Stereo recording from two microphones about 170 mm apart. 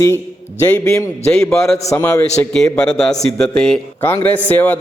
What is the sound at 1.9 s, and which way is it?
Speech, 15° left (ahead or behind).